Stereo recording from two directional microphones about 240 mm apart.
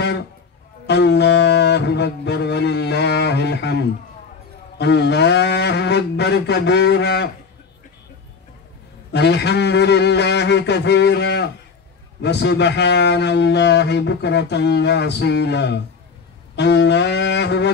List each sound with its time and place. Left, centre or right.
0.8 s a man's voice: left
9.1 s a man's voice: left